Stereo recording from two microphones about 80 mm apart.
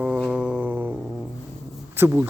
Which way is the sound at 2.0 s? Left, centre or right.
Right.